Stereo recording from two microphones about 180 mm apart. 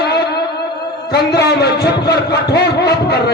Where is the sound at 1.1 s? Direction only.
65° left (ahead or behind).